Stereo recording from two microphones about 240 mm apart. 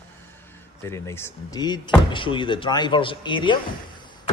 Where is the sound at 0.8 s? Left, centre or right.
Centre.